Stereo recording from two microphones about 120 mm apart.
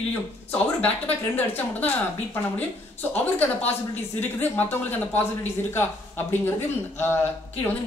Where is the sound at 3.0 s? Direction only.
15° left (ahead or behind).